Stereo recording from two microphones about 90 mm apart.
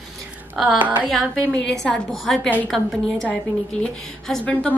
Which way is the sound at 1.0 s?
5° left (ahead or behind).